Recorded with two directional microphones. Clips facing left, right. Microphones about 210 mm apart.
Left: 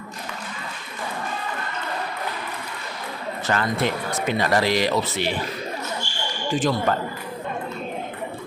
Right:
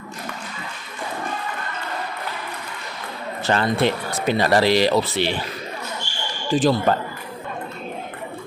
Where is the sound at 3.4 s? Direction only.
30° right (ahead or behind).